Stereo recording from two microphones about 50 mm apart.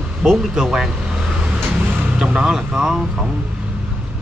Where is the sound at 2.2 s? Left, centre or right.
Centre.